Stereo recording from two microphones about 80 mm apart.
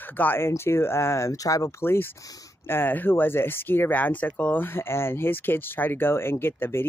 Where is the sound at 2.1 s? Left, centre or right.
Left.